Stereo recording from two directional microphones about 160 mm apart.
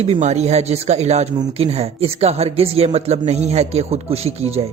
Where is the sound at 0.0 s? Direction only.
40° right (ahead or behind).